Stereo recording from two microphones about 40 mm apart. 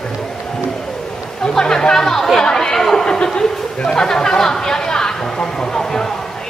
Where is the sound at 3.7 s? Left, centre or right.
Left.